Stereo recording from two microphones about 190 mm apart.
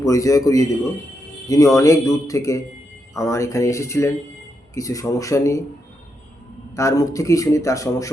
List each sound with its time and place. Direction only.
0.0 s speech: 15° left (ahead or behind)
6.7 s speech: 15° left (ahead or behind)